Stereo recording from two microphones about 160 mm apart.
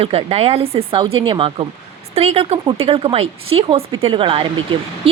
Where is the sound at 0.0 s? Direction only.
40° right (ahead or behind).